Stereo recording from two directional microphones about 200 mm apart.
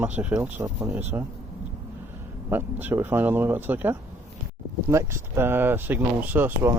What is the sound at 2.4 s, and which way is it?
Speech, 10° right (ahead or behind).